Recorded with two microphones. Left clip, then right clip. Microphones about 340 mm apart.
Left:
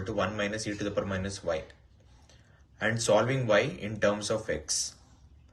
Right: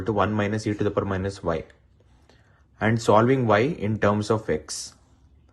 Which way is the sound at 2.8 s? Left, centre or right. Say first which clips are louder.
Right 6 dB; centre.